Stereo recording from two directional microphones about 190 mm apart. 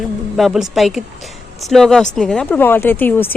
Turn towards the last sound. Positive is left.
turn(degrees=10)  # may be behind; listen again after turning